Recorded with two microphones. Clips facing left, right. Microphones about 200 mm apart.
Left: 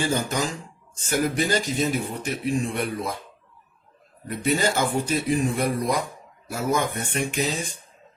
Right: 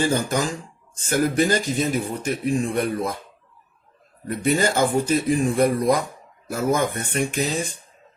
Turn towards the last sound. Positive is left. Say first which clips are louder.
# right 2 dB
turn(degrees=-45)  # may be behind; listen again after turning